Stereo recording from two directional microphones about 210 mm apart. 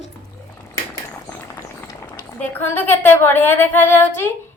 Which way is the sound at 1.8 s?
10° left (ahead or behind).